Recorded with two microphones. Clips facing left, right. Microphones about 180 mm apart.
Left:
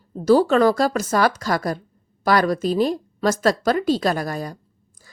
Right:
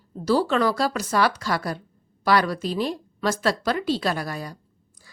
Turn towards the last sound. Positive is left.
turn(degrees=45)  # may be behind; listen again after turning